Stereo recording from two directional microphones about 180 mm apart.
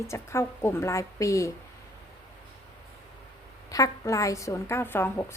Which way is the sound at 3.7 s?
20° left (ahead or behind).